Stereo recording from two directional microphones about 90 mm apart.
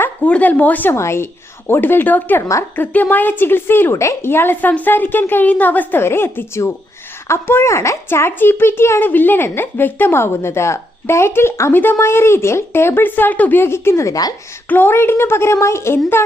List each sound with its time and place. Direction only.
0.3 s a woman's voice: 15° left (ahead or behind)
0.9 s a woman's voice: 30° left (ahead or behind)
2.4 s a woman's voice: 35° left (ahead or behind)
2.7 s a woman's voice: 20° left (ahead or behind); by 14.3 s 40° left (ahead or behind)
14.7 s a woman's voice: 25° left (ahead or behind)